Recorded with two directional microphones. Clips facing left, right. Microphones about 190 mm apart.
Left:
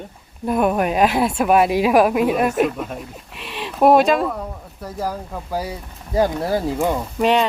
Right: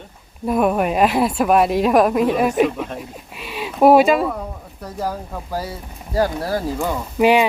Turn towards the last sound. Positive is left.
turn(degrees=-10)  # may be behind; listen again after turning